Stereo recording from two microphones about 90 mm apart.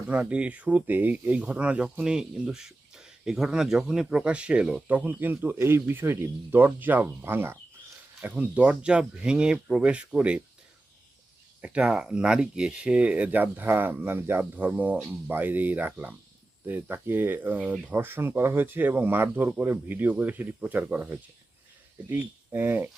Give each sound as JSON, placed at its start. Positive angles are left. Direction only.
{"t": 0.1, "sound": "speech", "side_deg": -15}
{"t": 11.6, "sound": "speech", "side_deg": -10}